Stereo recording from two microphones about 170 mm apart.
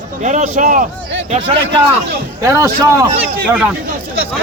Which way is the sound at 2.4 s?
20° right (ahead or behind).